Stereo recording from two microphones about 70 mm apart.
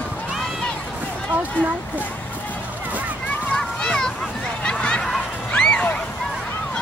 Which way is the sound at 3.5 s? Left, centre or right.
Centre.